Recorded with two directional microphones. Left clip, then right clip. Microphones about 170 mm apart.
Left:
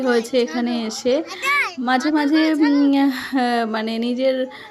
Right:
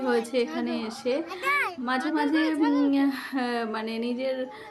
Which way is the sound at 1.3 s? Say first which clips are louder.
Left 6 dB; 20° right (ahead or behind).